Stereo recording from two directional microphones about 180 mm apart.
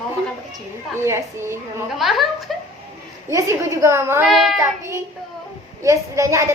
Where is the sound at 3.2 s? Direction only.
15° right (ahead or behind).